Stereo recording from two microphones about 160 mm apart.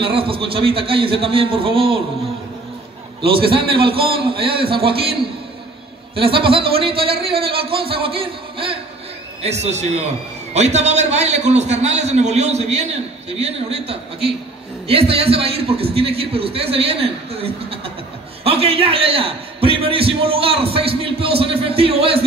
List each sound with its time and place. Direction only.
0.0 s a man's voice: 35° right (ahead or behind)
3.4 s a man's voice: 35° right (ahead or behind)
6.1 s a man's voice: 35° right (ahead or behind)